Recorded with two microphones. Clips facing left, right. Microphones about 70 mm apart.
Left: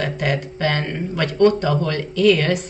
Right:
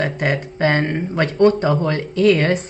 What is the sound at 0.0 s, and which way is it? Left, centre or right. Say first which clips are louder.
Speech: right 2 dB; right.